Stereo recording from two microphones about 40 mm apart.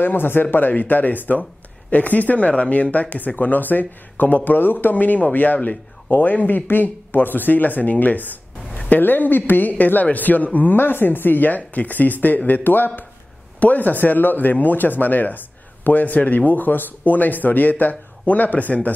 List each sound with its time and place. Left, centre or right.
0.0 s speech: left
4.8 s speech: left
8.7 s a sound: left
9.0 s speech: left
10.8 s speech: left
13.6 s speech: left